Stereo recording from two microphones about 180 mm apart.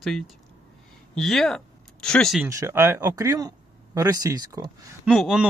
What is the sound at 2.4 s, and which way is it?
Speech, 15° right (ahead or behind).